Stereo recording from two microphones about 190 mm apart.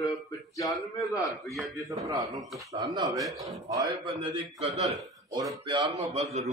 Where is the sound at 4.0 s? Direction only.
30° right (ahead or behind).